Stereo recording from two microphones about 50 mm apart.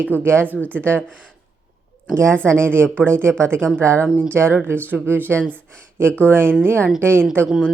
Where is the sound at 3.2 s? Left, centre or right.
Centre.